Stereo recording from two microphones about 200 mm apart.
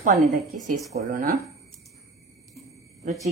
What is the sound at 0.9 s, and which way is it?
Speech, 45° right (ahead or behind).